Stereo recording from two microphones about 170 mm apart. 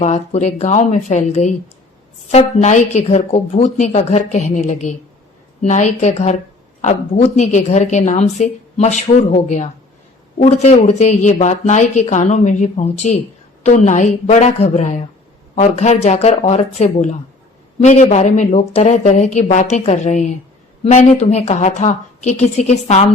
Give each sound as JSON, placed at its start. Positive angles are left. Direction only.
{"t": 0.0, "sound": "a woman's voice", "side_deg": 40}